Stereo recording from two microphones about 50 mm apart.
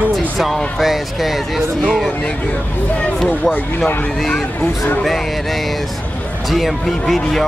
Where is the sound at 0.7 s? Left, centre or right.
Centre.